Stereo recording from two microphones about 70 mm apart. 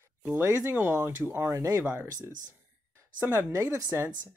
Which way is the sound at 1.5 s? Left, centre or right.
Right.